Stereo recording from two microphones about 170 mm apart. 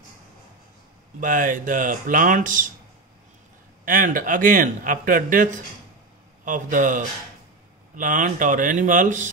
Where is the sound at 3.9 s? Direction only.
55° right (ahead or behind).